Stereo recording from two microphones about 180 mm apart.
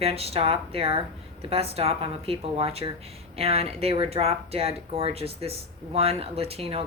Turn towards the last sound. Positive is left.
turn(degrees=-35)  # may be behind; listen again after turning